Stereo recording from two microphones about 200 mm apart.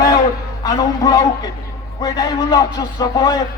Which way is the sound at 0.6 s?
20° left (ahead or behind).